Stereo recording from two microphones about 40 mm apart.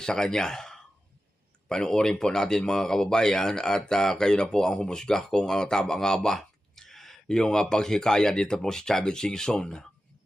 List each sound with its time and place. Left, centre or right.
0.0 s speech: centre
7.3 s speech: centre